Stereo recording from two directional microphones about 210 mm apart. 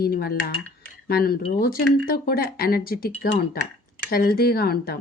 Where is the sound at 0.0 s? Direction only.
45° left (ahead or behind).